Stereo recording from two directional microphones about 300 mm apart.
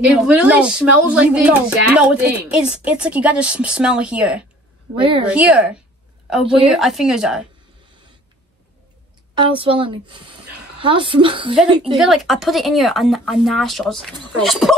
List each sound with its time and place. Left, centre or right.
0.0 s a woman's voice: centre
9.4 s speech: centre
12.0 s a woman's voice: centre